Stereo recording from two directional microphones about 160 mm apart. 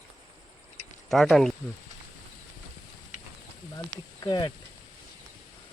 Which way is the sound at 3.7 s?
25° left (ahead or behind).